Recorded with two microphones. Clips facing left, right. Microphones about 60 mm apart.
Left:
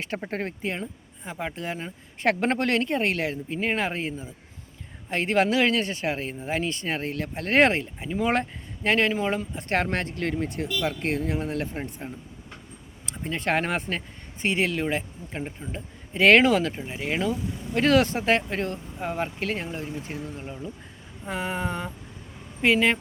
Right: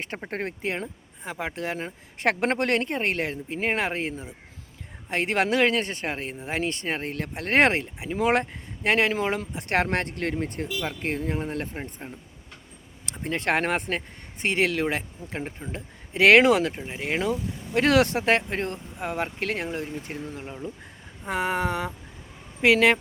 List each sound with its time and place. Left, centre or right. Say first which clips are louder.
0.3 s a man's voice: right 2 dB; right
0.6 s a man's voice: right 1 dB; right
9.2 s a man's voice: even; right
11.0 s speech: left 1 dB; right
12.0 s speech: left 3 dB; centre
13.2 s speech: right 1 dB; right
15.4 s a man's voice: even; right
15.7 s speech: right 1 dB; right
16.7 s speech: left 1 dB; centre
17.0 s a man's voice: right 1 dB; right
17.7 s speech: even; right
18.5 s a man's voice: even; right
19.0 s speech: even; right
21.2 s speech: right 3 dB; right